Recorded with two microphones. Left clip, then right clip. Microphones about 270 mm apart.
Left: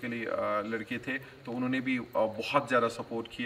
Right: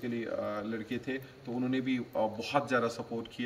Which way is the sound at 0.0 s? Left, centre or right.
Centre.